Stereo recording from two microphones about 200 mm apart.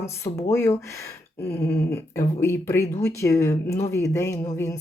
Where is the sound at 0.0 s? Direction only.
15° left (ahead or behind).